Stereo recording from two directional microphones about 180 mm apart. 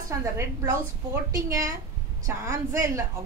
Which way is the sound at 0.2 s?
15° right (ahead or behind).